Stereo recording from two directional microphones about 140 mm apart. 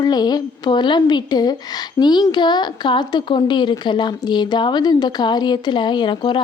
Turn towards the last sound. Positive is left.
turn(degrees=35)  # may be behind; listen again after turning